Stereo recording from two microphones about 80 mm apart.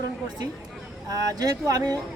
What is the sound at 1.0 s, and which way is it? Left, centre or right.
Speech, right.